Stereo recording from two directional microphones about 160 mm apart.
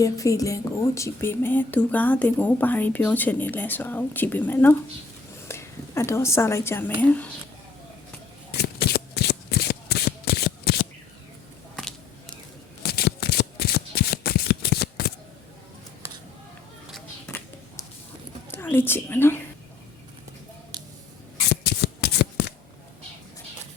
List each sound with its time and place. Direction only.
0.0 s speech: 20° left (ahead or behind)
8.5 s shuffling cards: 80° left
12.9 s shuffling cards: 80° left
16.9 s a sound: 5° left (ahead or behind)
18.5 s whispering: 10° left (ahead or behind)
20.7 s scissors: 25° right (ahead or behind)
21.3 s shuffling cards: 90° left